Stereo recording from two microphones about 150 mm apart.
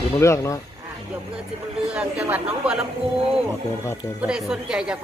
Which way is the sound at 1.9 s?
10° right (ahead or behind).